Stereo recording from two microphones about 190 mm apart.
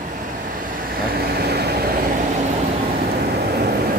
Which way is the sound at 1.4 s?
55° right (ahead or behind).